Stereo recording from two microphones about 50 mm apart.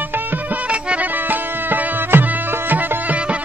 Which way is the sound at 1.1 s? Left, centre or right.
Right.